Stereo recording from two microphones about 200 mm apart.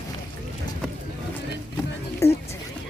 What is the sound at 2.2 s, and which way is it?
Music, 15° left (ahead or behind).